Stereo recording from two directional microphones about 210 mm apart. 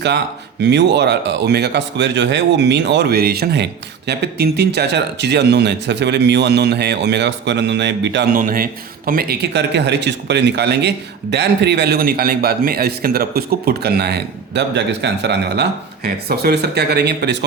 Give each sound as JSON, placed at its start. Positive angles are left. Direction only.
{"t": 0.6, "sound": "speech", "side_deg": -55}